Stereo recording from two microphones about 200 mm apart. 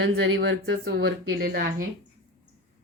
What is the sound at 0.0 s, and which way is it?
Speech, 70° right (ahead or behind).